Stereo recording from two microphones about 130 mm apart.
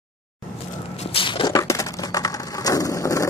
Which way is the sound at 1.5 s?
25° left (ahead or behind).